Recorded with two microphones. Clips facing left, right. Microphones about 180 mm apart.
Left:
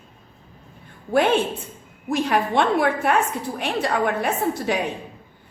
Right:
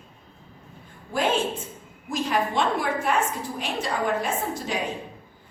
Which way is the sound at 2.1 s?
65° left (ahead or behind).